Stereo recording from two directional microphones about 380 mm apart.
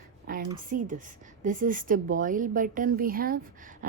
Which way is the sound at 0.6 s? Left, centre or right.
Right.